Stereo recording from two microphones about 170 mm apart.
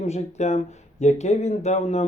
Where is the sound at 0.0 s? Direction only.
40° left (ahead or behind).